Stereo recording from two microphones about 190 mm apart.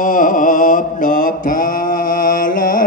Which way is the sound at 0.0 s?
45° left (ahead or behind).